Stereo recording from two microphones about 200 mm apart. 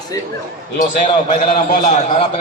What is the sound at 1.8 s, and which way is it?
Speech, 35° left (ahead or behind).